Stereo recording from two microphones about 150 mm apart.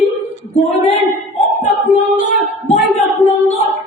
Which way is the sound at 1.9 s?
50° left (ahead or behind).